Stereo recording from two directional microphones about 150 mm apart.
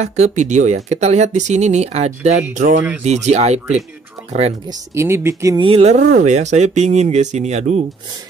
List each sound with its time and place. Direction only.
0.0 s speech: 50° right (ahead or behind)
4.6 s speech: 20° right (ahead or behind)
5.6 s speech: 40° right (ahead or behind)